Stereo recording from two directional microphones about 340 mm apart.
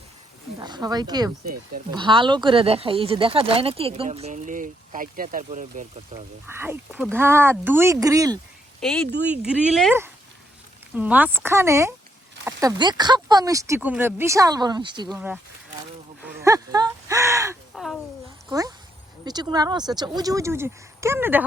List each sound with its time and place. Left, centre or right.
0.6 s speech: centre
6.5 s speech: centre
8.8 s speech: centre
16.2 s a sound: centre
18.4 s speech: centre